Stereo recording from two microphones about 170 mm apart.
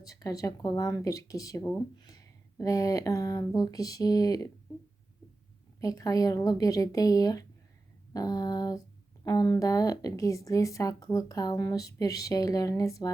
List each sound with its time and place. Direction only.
0.0 s speech: 20° left (ahead or behind)
5.8 s speech: 20° left (ahead or behind)